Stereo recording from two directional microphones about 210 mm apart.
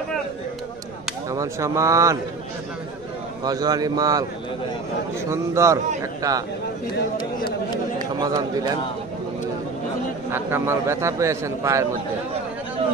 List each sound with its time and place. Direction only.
1.3 s a man's voice: 15° right (ahead or behind)
3.4 s a man's voice: 20° right (ahead or behind)
5.3 s a man's voice: 15° right (ahead or behind)
8.2 s a man's voice: 15° right (ahead or behind)
10.3 s a man's voice: 10° right (ahead or behind)